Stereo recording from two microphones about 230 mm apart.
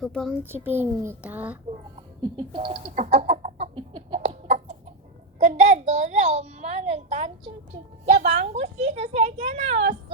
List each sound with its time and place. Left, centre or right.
0.0 s a child's voice: centre
0.4 s a child's voice: centre
2.2 s chicken: centre
5.4 s a child's voice: right